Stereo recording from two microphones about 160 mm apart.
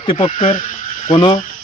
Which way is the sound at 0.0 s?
35° left (ahead or behind).